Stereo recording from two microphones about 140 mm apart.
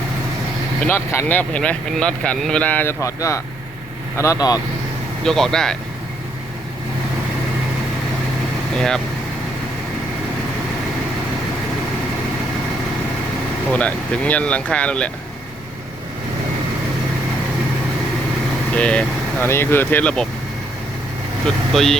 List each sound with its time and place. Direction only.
0.8 s speech: 15° left (ahead or behind)
3.0 s speech: 20° left (ahead or behind)
5.2 s speech: 5° left (ahead or behind)
13.7 s speech: 10° left (ahead or behind)
18.7 s speech: 10° left (ahead or behind)
21.4 s speech: centre (ahead or behind)